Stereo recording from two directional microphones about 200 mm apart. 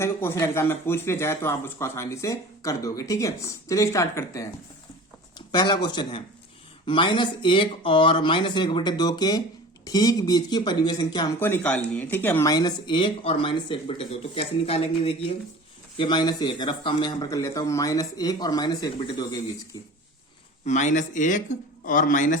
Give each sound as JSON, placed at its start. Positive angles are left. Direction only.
{"t": 0.0, "sound": "speech", "side_deg": 15}
{"t": 5.5, "sound": "speech", "side_deg": 20}
{"t": 11.4, "sound": "speech", "side_deg": 10}
{"t": 20.7, "sound": "speech", "side_deg": 35}